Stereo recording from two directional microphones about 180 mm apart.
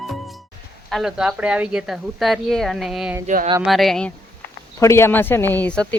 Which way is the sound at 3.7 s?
Centre (ahead or behind).